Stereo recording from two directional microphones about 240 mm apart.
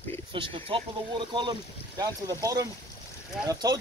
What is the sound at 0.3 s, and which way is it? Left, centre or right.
Speech, right.